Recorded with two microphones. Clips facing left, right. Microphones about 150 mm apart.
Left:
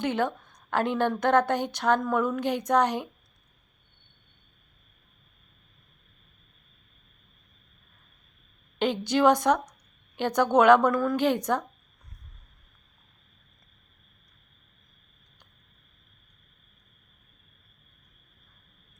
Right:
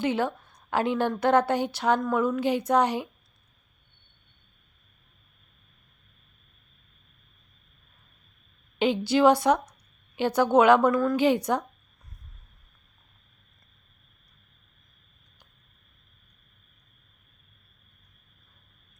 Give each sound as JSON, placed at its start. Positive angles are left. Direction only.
{"t": 0.0, "sound": "a woman's voice", "side_deg": -5}
{"t": 8.8, "sound": "a woman's voice", "side_deg": -10}
{"t": 11.3, "sound": "a woman's voice", "side_deg": -10}